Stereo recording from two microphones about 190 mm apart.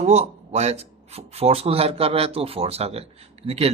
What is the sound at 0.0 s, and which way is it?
Speech, 35° right (ahead or behind).